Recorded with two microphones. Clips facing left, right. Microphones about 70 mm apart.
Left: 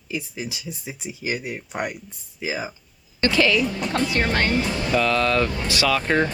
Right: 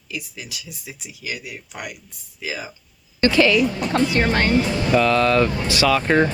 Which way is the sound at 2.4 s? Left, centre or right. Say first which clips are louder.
Left 2 dB; left.